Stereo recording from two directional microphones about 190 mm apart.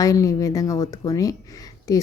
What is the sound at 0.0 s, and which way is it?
A woman's voice, 15° left (ahead or behind).